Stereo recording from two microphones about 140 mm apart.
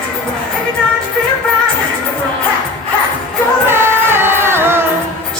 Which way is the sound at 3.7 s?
15° right (ahead or behind).